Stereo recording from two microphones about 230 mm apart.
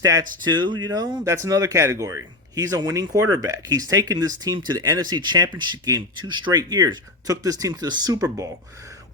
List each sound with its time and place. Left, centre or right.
0.0 s speech: centre